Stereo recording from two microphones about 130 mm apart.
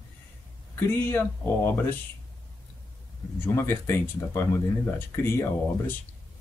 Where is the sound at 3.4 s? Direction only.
15° left (ahead or behind).